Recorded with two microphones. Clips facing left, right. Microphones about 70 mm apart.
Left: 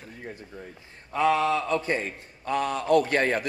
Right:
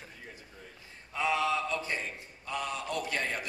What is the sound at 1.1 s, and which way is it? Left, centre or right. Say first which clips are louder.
A man's voice: left 7 dB; left.